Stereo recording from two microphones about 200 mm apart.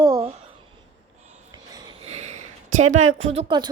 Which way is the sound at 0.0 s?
25° right (ahead or behind).